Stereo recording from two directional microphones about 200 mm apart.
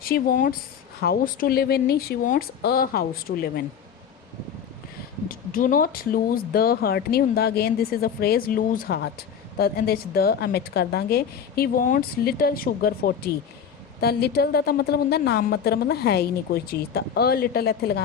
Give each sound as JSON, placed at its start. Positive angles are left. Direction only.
{"t": 0.0, "sound": "speech", "side_deg": 45}
{"t": 5.3, "sound": "speech", "side_deg": 45}